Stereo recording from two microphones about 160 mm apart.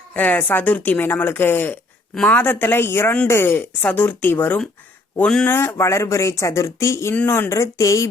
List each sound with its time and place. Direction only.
0.1 s speech: 10° left (ahead or behind)